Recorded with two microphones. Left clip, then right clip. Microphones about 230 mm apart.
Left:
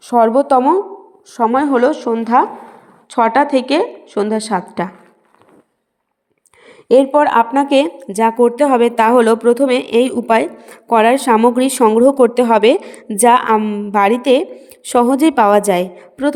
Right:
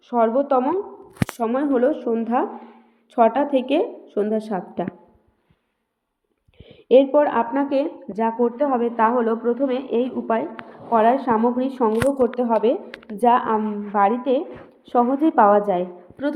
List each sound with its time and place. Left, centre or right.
0.0 s a woman's voice: left
1.4 s a woman's voice: left
6.8 s a woman's voice: left